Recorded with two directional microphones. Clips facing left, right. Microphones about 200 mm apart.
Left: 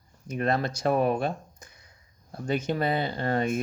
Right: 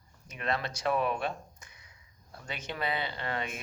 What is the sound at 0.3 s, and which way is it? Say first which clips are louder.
Speech: left 7 dB; 45° left (ahead or behind).